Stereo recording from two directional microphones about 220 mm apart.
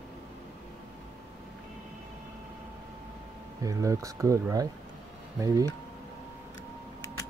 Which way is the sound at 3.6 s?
15° right (ahead or behind).